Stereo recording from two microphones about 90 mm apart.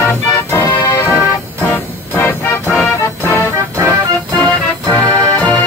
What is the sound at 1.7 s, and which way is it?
Music, 25° left (ahead or behind).